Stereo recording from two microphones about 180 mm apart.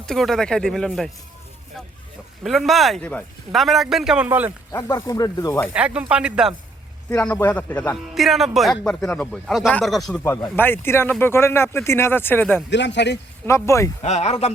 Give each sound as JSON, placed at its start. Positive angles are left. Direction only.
{"t": 0.0, "sound": "speech", "side_deg": 0}
{"t": 2.4, "sound": "speech", "side_deg": 0}
{"t": 4.7, "sound": "speech", "side_deg": 15}
{"t": 5.7, "sound": "speech", "side_deg": -5}
{"t": 7.1, "sound": "speech", "side_deg": 10}
{"t": 7.9, "sound": "speech", "side_deg": 0}
{"t": 10.2, "sound": "speech", "side_deg": 15}
{"t": 12.7, "sound": "speech", "side_deg": 75}
{"t": 13.4, "sound": "speech", "side_deg": 15}
{"t": 14.0, "sound": "speech", "side_deg": 35}